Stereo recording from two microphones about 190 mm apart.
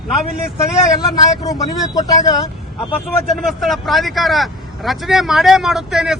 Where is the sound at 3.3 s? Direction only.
Centre (ahead or behind).